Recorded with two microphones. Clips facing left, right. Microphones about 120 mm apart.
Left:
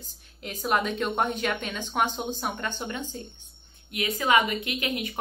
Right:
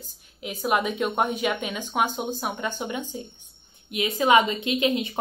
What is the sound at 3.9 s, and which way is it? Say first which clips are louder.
Speech: right 4 dB; 20° right (ahead or behind).